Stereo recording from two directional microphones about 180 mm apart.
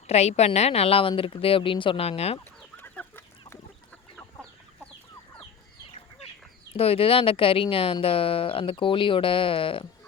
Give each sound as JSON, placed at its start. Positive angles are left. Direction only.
{"t": 0.1, "sound": "speech", "side_deg": 35}
{"t": 2.7, "sound": "chicken", "side_deg": 10}
{"t": 6.7, "sound": "speech", "side_deg": 30}